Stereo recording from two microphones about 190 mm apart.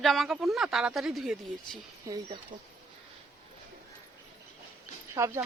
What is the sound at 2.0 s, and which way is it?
Speech, 20° right (ahead or behind).